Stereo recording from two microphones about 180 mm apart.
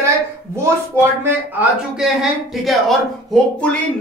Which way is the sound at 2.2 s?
Centre (ahead or behind).